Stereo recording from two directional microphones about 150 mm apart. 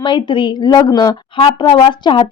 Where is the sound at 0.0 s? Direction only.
30° left (ahead or behind).